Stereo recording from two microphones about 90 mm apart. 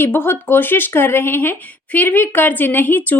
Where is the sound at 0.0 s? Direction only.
25° left (ahead or behind).